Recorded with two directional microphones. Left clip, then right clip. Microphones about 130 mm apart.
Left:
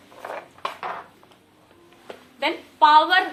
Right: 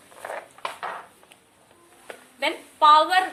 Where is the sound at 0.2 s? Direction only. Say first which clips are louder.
Left 1 dB; 20° right (ahead or behind).